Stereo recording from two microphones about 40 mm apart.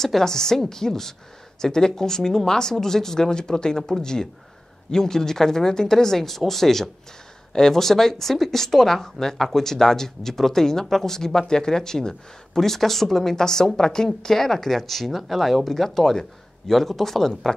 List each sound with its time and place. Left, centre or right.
0.0 s speech: centre